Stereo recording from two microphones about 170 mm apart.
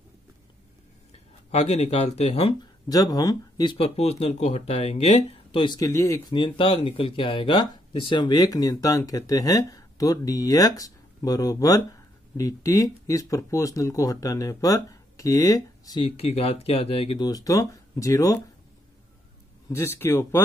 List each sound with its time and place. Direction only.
1.5 s speech: 40° left (ahead or behind)
2.9 s speech: 20° left (ahead or behind)
3.7 s speech: 35° left (ahead or behind)
16.2 s speech: 35° left (ahead or behind); by 18.4 s 20° left (ahead or behind)
19.7 s speech: 15° left (ahead or behind)